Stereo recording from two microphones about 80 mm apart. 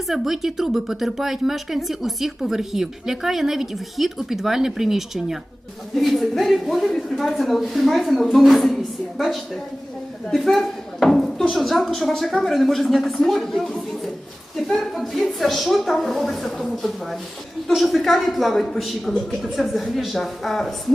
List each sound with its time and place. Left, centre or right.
0.1 s speech: centre